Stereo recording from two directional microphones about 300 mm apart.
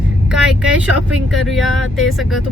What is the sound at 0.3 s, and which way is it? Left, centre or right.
Vehicle, centre.